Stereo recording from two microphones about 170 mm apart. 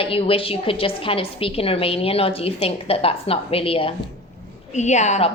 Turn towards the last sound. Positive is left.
turn(degrees=45)  # may be behind; listen again after turning